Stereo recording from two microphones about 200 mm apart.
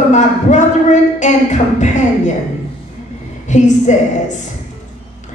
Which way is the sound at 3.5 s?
35° left (ahead or behind).